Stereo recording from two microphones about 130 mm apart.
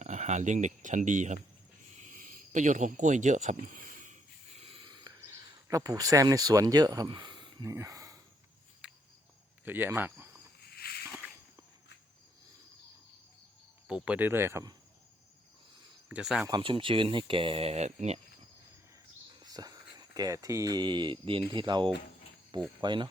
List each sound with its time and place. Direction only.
0.0 s speech: 65° right (ahead or behind)
2.0 s a sound: 80° right
4.5 s a sound: 50° right (ahead or behind)
4.9 s a sound: 35° right (ahead or behind)
5.6 s speech: 25° right (ahead or behind)
8.8 s cricket: 10° right (ahead or behind)
9.6 s speech: 15° right (ahead or behind)
13.8 s speech: 10° right (ahead or behind); by 14.8 s 25° right (ahead or behind)
16.0 s speech: 5° right (ahead or behind)
16.5 s speech: 40° right (ahead or behind); by 18.2 s 60° right (ahead or behind)
19.4 s speech: 30° right (ahead or behind)